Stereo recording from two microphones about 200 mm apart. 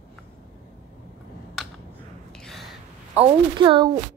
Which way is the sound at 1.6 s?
Centre (ahead or behind).